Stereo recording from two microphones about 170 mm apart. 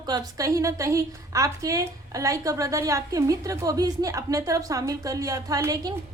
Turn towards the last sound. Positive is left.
turn(degrees=-20)  # may be behind; listen again after turning